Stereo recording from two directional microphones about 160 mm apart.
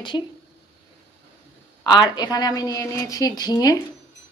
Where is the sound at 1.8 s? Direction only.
25° left (ahead or behind).